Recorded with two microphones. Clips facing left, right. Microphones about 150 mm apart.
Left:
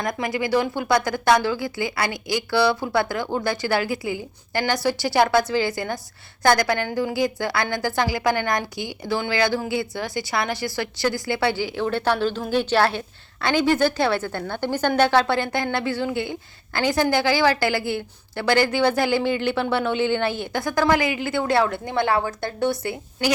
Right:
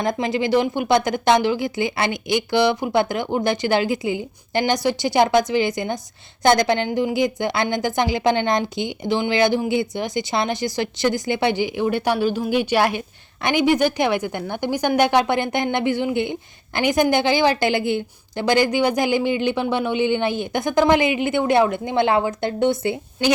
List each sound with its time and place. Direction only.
0.0 s a woman's voice: 25° right (ahead or behind)